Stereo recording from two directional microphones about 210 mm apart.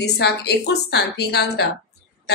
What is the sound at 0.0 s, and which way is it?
A woman's voice, 50° left (ahead or behind).